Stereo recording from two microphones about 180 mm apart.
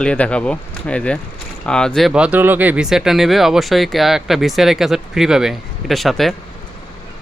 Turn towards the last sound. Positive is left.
turn(degrees=0)  # may be behind; listen again after turning